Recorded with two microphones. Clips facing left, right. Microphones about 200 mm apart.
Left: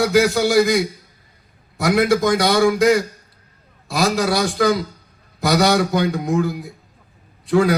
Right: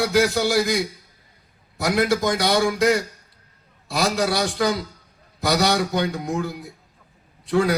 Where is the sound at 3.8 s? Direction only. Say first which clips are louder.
Left 3 dB; 50° left (ahead or behind).